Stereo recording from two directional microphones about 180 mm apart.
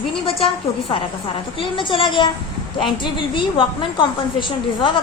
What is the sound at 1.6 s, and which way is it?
A woman's voice, 30° left (ahead or behind).